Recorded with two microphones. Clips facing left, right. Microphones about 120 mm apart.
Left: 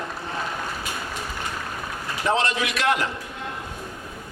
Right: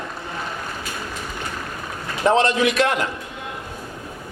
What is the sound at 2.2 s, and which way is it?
Speech, 35° right (ahead or behind).